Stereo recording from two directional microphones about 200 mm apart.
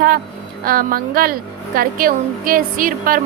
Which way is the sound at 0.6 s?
45° right (ahead or behind).